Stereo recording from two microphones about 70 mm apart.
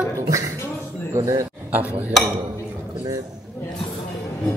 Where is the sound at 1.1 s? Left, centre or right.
Right.